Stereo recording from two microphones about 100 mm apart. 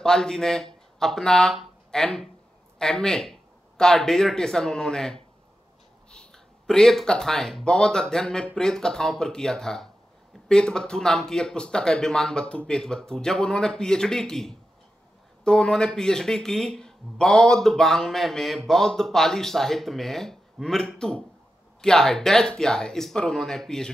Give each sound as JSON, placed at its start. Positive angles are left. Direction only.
{"t": 0.0, "sound": "speech", "side_deg": 5}